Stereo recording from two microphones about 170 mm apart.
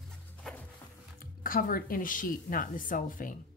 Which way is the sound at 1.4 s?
55° left (ahead or behind).